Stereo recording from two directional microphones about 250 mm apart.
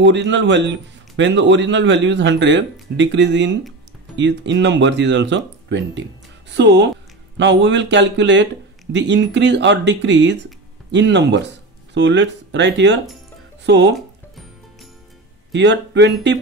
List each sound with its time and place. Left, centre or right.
0.0 s a man's voice: right
13.9 s music: centre
15.5 s a man's voice: right